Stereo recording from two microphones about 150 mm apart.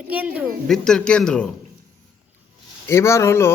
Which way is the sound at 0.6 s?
5° left (ahead or behind).